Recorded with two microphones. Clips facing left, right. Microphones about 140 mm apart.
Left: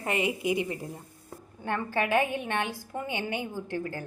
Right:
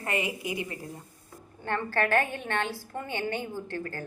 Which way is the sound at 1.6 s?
15° left (ahead or behind).